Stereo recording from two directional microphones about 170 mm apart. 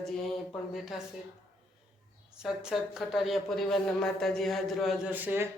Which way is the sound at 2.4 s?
5° right (ahead or behind).